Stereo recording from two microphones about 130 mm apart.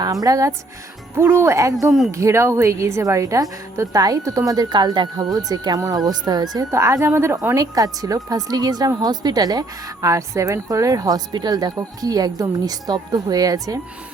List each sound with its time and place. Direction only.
0.0 s speech: 30° right (ahead or behind)